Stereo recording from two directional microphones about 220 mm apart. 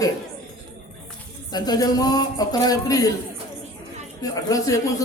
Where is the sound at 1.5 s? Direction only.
20° left (ahead or behind).